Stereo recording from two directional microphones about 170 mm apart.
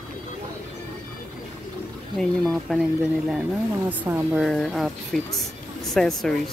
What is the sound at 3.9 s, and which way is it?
Speech, 10° right (ahead or behind).